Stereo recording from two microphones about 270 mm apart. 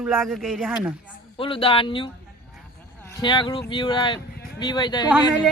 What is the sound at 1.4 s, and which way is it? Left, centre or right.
Speech, centre.